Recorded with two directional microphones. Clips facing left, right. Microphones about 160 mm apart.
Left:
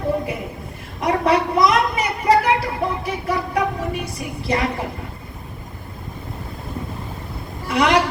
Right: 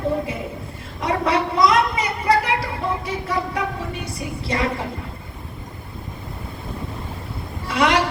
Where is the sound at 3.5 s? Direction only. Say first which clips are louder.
Left 4 dB; 30° right (ahead or behind).